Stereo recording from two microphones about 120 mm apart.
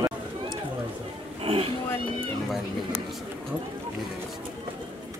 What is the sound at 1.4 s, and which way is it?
Speech, 50° right (ahead or behind).